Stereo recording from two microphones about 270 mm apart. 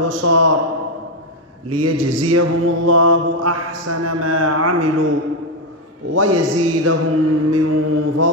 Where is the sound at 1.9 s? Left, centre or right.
Right.